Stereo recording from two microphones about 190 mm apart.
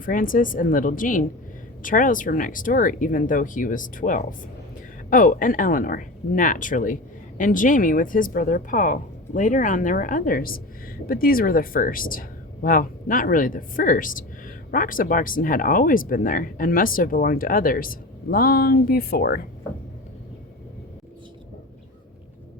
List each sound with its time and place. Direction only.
0.0 s speech: 45° left (ahead or behind)